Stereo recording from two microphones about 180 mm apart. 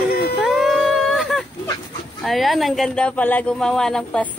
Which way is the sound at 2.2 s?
Centre (ahead or behind).